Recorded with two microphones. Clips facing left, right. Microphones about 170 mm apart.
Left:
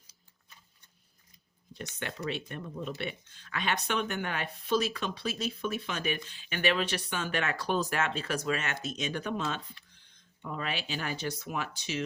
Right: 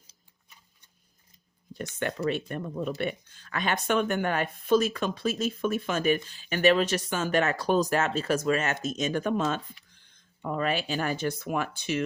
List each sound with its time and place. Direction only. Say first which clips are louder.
1.7 s a woman's voice: right 7 dB; 50° right (ahead or behind)